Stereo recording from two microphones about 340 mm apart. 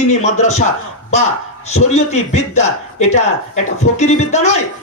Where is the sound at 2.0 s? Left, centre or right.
Centre.